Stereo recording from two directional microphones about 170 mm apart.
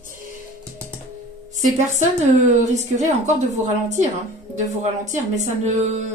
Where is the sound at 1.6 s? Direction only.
45° right (ahead or behind).